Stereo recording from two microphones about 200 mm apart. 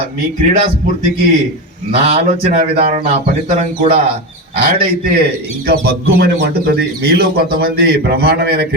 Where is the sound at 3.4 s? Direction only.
35° right (ahead or behind).